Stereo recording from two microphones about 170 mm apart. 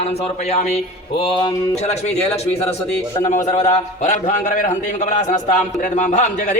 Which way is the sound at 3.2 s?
45° left (ahead or behind).